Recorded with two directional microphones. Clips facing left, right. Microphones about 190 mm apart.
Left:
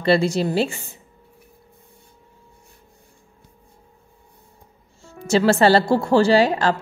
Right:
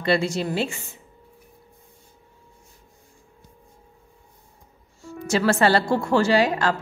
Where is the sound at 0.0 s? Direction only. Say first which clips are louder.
Left 4 dB; 35° left (ahead or behind).